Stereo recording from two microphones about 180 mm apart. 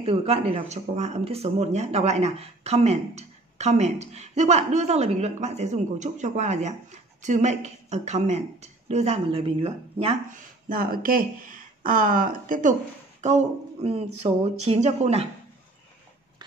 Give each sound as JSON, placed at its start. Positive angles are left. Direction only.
{"t": 0.0, "sound": "speech", "side_deg": -30}
{"t": 10.3, "sound": "speech", "side_deg": -55}